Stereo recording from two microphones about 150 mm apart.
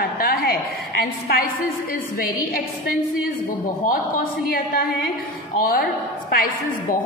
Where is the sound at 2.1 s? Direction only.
75° left (ahead or behind).